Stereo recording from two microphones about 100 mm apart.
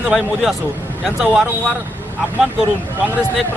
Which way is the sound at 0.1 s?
5° right (ahead or behind).